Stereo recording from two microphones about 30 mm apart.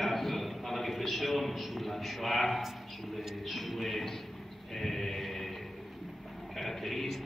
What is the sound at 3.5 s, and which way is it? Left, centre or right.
Music, centre.